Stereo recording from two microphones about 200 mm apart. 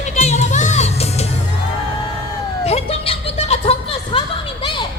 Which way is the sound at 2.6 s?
30° left (ahead or behind).